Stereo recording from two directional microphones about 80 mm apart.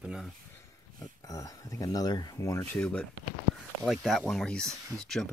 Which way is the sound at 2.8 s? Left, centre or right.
Centre.